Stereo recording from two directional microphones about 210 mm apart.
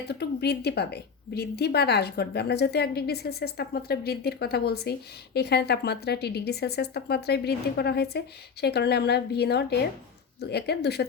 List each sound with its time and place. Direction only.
0.1 s a woman's voice: 50° left (ahead or behind)